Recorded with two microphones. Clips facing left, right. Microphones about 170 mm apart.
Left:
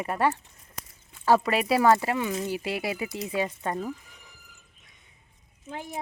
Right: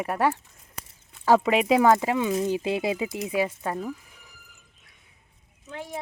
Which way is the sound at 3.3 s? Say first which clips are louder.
Right 2 dB; 5° right (ahead or behind).